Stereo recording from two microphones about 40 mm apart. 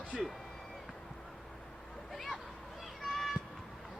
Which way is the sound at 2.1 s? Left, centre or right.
Centre.